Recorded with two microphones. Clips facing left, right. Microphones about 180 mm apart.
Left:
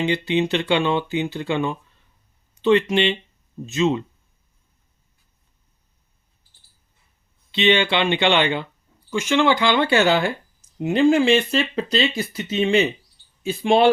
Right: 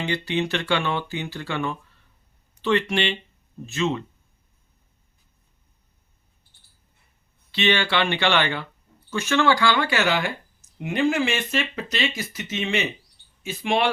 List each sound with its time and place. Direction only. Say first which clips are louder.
0.0 s speech: left 5 dB; 20° left (ahead or behind)
7.5 s speech: left 4 dB; 20° left (ahead or behind)